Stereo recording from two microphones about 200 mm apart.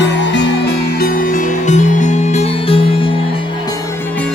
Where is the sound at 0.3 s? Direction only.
55° left (ahead or behind); by 3.1 s 25° left (ahead or behind).